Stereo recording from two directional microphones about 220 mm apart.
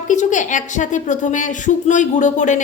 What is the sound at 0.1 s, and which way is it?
A woman's voice, 35° left (ahead or behind).